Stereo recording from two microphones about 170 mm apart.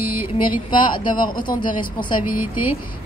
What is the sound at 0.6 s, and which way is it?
A woman's voice, 25° left (ahead or behind).